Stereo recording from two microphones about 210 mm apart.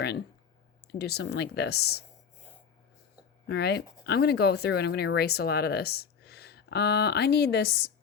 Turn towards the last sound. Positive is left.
turn(degrees=50)  # may be behind; listen again after turning